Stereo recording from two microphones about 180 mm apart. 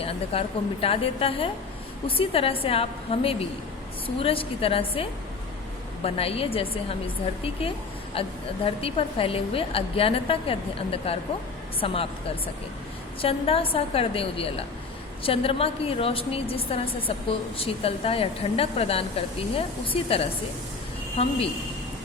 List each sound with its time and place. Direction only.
0.0 s a woman's voice: 30° left (ahead or behind)
13.2 s a woman's voice: 30° left (ahead or behind)